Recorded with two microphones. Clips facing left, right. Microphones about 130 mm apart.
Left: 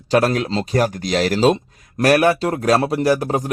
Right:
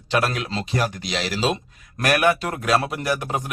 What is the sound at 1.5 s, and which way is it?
Speech, 30° left (ahead or behind).